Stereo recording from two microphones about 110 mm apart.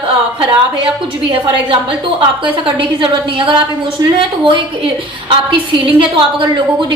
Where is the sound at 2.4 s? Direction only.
50° right (ahead or behind).